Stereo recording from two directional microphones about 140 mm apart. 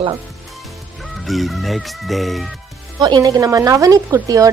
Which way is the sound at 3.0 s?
30° right (ahead or behind).